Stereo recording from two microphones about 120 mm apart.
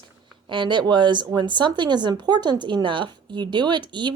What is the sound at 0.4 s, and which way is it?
Speech, 40° right (ahead or behind).